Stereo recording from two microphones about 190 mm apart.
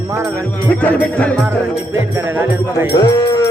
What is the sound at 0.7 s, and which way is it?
Music, 10° left (ahead or behind).